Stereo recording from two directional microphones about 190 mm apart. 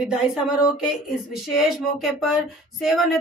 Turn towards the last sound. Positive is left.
turn(degrees=0)  # may be behind; listen again after turning